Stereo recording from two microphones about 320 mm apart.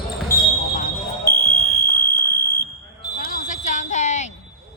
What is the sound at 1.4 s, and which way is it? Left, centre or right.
Fire alarm, left.